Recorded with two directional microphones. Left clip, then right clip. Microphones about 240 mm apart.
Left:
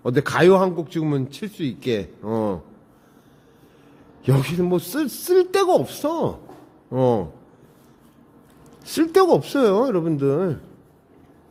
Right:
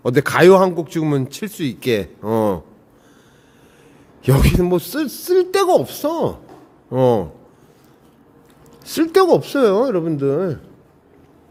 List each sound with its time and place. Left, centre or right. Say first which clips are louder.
0.0 s speech: right 5 dB; centre
4.2 s speech: right 5 dB; centre
4.9 s speech: right 2 dB; centre
8.8 s speech: right 2 dB; centre